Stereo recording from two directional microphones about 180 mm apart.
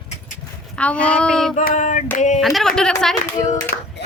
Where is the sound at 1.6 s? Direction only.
45° left (ahead or behind).